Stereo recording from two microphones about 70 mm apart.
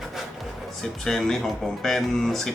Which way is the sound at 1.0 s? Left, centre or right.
Centre.